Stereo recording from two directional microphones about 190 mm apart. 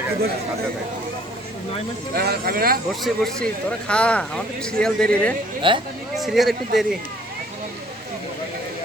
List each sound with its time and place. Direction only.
2.1 s speech: 55° right (ahead or behind)
2.9 s speech: centre (ahead or behind)
5.6 s speech: 25° right (ahead or behind)
6.1 s speech: centre (ahead or behind)